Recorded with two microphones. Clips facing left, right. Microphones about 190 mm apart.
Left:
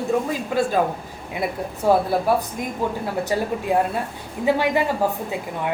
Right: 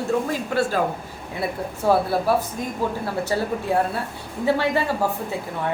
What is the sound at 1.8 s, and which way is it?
Speech, 15° left (ahead or behind).